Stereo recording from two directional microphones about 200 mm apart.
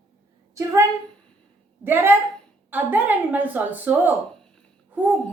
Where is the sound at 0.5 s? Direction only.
15° right (ahead or behind).